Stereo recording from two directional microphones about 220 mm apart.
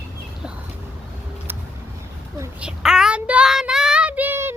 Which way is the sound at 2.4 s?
5° right (ahead or behind).